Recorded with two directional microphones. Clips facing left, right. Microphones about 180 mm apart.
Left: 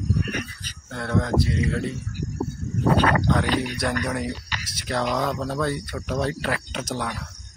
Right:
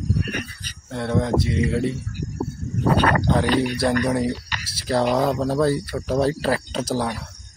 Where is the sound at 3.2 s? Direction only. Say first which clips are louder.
Right 3 dB; 30° right (ahead or behind).